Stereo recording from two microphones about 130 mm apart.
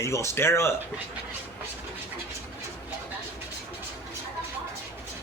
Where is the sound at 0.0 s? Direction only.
20° left (ahead or behind).